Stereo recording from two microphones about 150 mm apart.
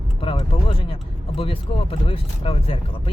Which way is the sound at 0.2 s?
35° left (ahead or behind).